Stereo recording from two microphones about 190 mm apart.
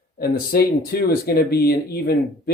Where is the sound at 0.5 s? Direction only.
55° left (ahead or behind).